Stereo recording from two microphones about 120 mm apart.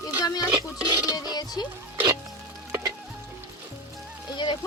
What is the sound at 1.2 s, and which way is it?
Speech, 35° left (ahead or behind).